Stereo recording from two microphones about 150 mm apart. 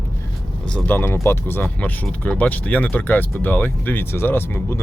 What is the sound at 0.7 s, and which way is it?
Speech, 15° left (ahead or behind).